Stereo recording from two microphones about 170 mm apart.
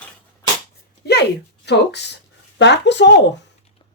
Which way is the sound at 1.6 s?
85° left.